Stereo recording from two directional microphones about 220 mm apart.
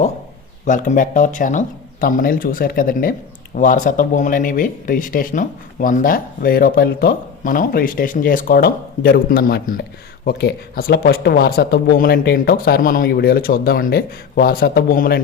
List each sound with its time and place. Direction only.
0.6 s speech: 35° left (ahead or behind)